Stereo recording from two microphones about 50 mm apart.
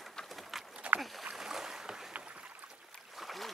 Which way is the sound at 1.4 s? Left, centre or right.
Centre.